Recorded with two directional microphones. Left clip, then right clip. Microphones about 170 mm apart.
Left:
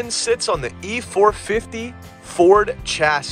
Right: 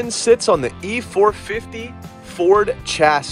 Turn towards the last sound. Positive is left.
turn(degrees=10)  # may be behind; listen again after turning